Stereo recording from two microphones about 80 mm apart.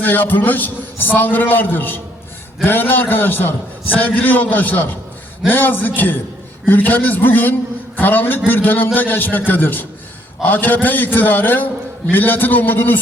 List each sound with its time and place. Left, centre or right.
0.0 s a man's voice: left